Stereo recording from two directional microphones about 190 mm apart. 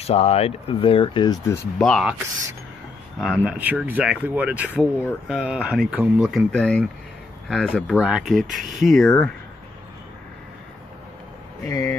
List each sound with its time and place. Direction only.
0.0 s speech: 35° left (ahead or behind); by 1.7 s 15° left (ahead or behind)
1.8 s speech: centre (ahead or behind)
3.2 s speech: 5° right (ahead or behind)
11.6 s speech: 15° left (ahead or behind)